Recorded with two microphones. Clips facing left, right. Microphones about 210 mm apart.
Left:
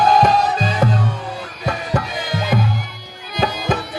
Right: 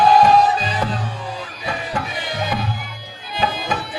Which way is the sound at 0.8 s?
45° left (ahead or behind).